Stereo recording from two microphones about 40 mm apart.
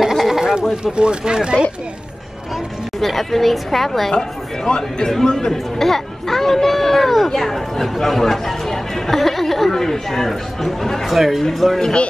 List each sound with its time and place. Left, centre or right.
0.0 s a sound: centre
0.4 s goat: centre
0.9 s speech: right
3.0 s speech: centre
4.1 s speech: centre
11.8 s speech: left